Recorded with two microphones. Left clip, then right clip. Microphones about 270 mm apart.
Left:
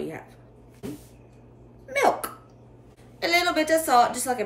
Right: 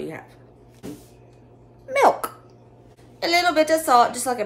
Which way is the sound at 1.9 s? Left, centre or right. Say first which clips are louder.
Right 5 dB; centre.